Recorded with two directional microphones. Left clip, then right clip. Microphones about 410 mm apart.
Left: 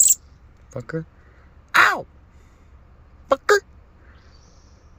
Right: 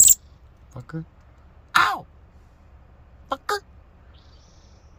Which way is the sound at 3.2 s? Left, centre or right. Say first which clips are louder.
Left 9 dB; centre.